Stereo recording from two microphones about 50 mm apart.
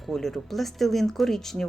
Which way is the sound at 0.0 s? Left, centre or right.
Centre.